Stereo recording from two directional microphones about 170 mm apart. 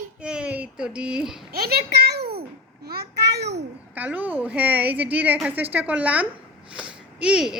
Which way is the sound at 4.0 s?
10° right (ahead or behind).